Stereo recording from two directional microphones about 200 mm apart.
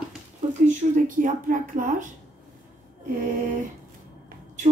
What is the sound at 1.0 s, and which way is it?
A woman's voice, 40° right (ahead or behind).